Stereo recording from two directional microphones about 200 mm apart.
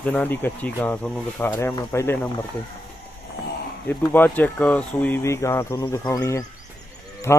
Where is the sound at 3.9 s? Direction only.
10° left (ahead or behind).